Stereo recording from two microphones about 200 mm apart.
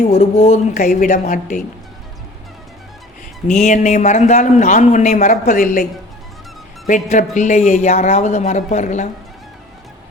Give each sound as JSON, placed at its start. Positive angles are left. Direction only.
{"t": 0.1, "sound": "a man's voice", "side_deg": 35}
{"t": 3.4, "sound": "a man's voice", "side_deg": 35}
{"t": 6.8, "sound": "a man's voice", "side_deg": 40}